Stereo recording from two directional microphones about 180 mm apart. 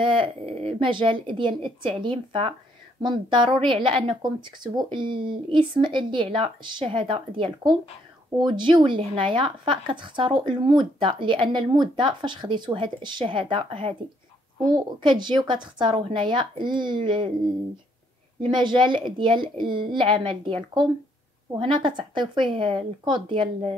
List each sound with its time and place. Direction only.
0.0 s a woman's voice: 30° right (ahead or behind)
18.4 s a woman's voice: 25° right (ahead or behind)